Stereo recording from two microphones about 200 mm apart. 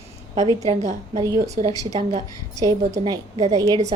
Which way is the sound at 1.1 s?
20° right (ahead or behind).